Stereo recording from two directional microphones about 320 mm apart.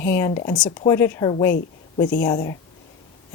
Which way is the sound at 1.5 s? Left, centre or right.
Left.